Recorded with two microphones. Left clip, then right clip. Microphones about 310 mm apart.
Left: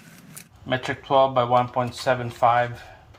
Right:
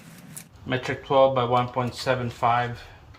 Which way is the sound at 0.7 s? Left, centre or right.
Centre.